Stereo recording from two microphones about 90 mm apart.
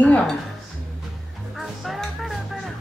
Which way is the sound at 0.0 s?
10° left (ahead or behind).